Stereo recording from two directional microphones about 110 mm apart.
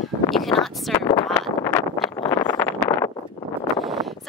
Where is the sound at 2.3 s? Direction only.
30° left (ahead or behind).